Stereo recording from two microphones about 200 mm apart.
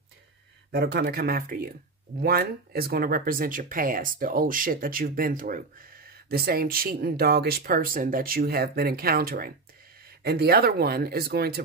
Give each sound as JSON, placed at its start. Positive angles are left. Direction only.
{"t": 0.7, "sound": "speech", "side_deg": -50}